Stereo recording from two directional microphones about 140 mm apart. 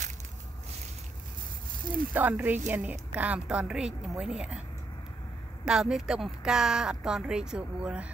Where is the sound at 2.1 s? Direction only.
15° right (ahead or behind).